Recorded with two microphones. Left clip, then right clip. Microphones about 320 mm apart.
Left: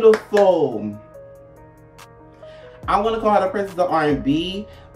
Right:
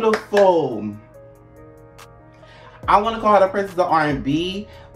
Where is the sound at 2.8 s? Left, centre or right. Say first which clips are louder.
Right 2 dB; centre.